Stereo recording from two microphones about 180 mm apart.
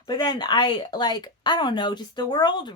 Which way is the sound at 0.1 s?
25° left (ahead or behind).